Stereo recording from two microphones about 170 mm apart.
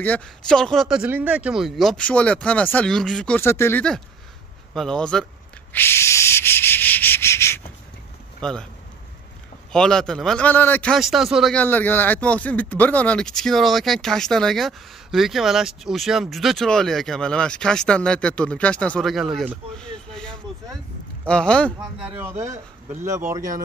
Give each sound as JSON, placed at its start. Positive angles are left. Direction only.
{"t": 0.0, "sound": "speech", "side_deg": 5}
{"t": 4.7, "sound": "speech", "side_deg": 5}
{"t": 5.7, "sound": "rub", "side_deg": 15}
{"t": 8.4, "sound": "speech", "side_deg": 5}
{"t": 9.7, "sound": "speech", "side_deg": 5}
{"t": 11.6, "sound": "speech", "side_deg": 10}
{"t": 19.8, "sound": "a sound", "side_deg": 5}
{"t": 21.3, "sound": "speech", "side_deg": 5}
{"t": 22.0, "sound": "speech", "side_deg": -15}